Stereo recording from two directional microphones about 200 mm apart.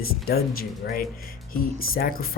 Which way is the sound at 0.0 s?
50° left (ahead or behind).